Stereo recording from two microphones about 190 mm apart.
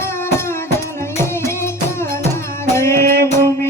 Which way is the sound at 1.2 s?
15° left (ahead or behind).